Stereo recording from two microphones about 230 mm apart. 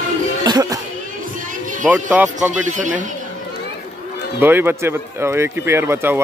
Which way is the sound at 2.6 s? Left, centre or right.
Right.